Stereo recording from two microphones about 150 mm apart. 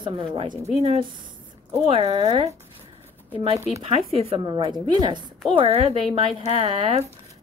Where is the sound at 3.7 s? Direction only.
45° right (ahead or behind).